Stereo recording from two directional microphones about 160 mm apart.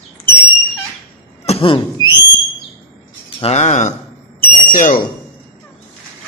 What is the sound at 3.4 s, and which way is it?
A man's voice, 45° left (ahead or behind).